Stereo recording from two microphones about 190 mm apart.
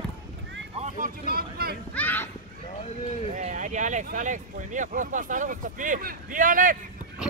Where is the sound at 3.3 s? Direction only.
40° right (ahead or behind).